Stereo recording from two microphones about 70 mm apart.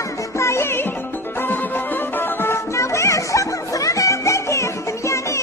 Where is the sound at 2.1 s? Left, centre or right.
Left.